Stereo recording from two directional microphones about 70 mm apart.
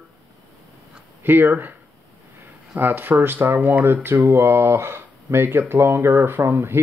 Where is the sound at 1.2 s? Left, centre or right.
Right.